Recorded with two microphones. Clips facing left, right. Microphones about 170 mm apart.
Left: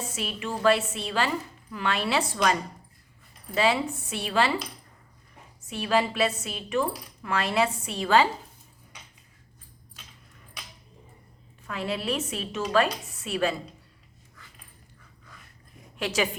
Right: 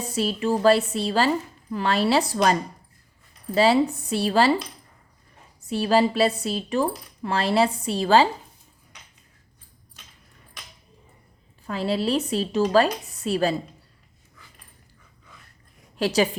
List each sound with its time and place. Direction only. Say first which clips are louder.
0.1 s speech: right 9 dB; 35° right (ahead or behind)
5.6 s speech: right 5 dB; 35° right (ahead or behind)
11.6 s speech: right 6 dB; 35° right (ahead or behind)
16.0 s speech: right 6 dB; 35° right (ahead or behind)